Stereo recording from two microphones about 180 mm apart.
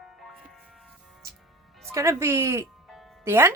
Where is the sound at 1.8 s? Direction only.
15° right (ahead or behind).